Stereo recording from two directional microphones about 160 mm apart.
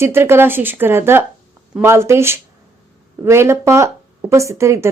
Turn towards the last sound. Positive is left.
turn(degrees=-20)  # may be behind; listen again after turning